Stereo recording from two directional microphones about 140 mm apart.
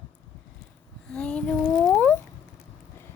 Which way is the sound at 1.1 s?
5° left (ahead or behind).